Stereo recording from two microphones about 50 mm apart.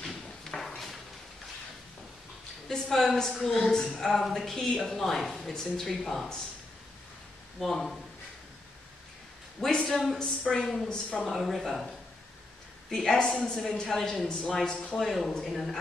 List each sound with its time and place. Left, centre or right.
0.0 s drawer open or close: centre
2.9 s speech: centre
7.6 s speech: centre
9.6 s a man's voice: centre
10.9 s speech: centre
11.2 s speech: centre
12.9 s speech: centre